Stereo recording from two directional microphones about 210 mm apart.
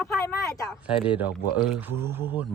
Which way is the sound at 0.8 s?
5° right (ahead or behind).